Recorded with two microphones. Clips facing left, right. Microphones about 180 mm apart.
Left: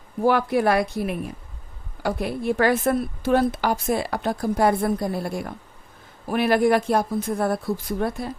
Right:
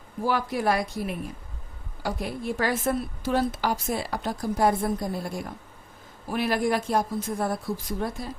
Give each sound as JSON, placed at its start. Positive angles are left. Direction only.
{"t": 0.3, "sound": "a woman's voice", "side_deg": 60}